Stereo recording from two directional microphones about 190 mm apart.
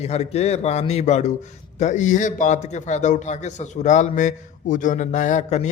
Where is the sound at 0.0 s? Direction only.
35° left (ahead or behind).